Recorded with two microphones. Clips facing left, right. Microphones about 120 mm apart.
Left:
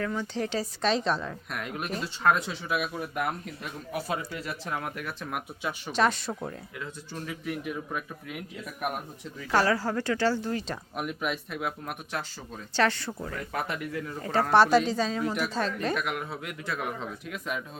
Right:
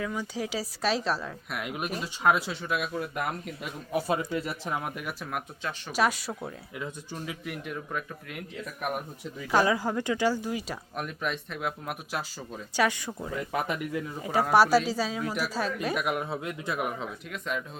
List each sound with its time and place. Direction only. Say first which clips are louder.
0.0 s speech: left 2 dB; 10° right (ahead or behind)
4.1 s speech: right 4 dB; 20° right (ahead or behind)
5.2 s speech: left 2 dB; 5° left (ahead or behind)
5.9 s speech: left 1 dB; 10° right (ahead or behind)
7.4 s speech: left 3 dB; centre (ahead or behind)
9.5 s speech: even; 15° right (ahead or behind)
10.9 s speech: left 1 dB; 5° left (ahead or behind); by 16.8 s 20° right (ahead or behind)
17.0 s speech: even; centre (ahead or behind)